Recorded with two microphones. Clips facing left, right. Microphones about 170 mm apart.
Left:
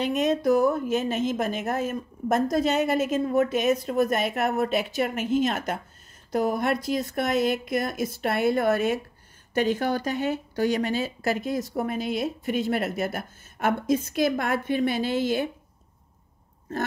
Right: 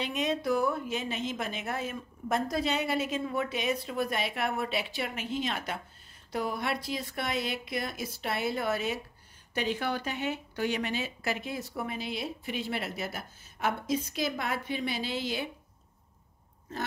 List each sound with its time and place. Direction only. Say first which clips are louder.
0.0 s speech: left 7 dB; 45° left (ahead or behind)